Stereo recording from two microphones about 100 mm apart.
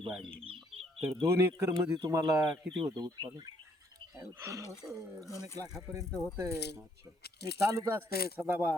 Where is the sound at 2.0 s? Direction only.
40° right (ahead or behind).